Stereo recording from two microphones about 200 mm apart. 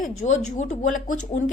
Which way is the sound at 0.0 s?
35° left (ahead or behind).